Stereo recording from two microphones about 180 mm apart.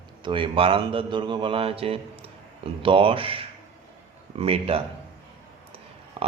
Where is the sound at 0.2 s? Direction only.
30° right (ahead or behind).